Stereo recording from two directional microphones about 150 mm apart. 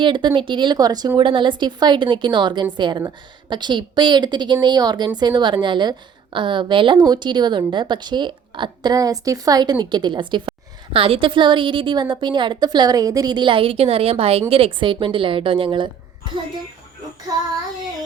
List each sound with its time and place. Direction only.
0.0 s a woman's voice: 30° right (ahead or behind)